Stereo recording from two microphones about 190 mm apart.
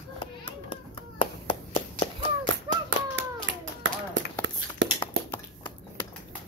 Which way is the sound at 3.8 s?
80° right.